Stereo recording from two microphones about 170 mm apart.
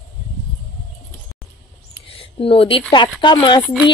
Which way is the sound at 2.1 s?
35° left (ahead or behind).